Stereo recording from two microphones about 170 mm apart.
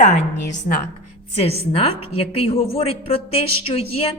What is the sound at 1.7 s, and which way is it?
Speech, 35° left (ahead or behind).